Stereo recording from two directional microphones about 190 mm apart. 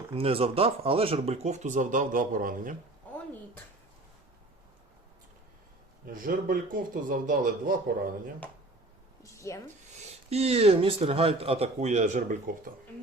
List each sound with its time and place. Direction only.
0.1 s speech: 30° right (ahead or behind); by 2.7 s 45° right (ahead or behind)
3.1 s a sound: 10° left (ahead or behind)
6.1 s speech: 45° right (ahead or behind)
9.2 s speech: 15° left (ahead or behind)
10.2 s speech: 35° right (ahead or behind)